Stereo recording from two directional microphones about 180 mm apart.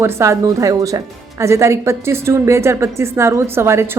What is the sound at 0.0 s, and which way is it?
A woman's voice, 15° right (ahead or behind).